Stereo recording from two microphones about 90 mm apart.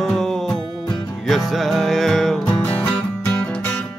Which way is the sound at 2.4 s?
20° left (ahead or behind).